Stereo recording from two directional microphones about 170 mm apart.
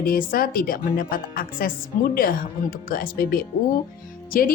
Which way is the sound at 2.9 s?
60° left (ahead or behind).